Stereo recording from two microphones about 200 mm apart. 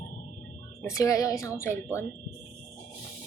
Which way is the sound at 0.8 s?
15° left (ahead or behind).